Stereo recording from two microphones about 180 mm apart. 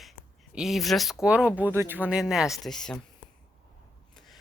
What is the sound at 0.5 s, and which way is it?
Speech, centre (ahead or behind).